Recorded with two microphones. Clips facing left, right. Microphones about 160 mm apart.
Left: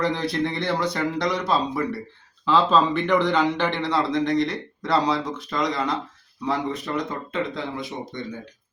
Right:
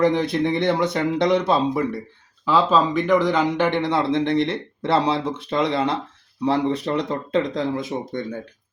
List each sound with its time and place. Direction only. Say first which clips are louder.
0.0 s speech: right 5 dB; 20° right (ahead or behind)
2.4 s speech: right 1 dB; 10° right (ahead or behind); by 8.4 s 50° right (ahead or behind)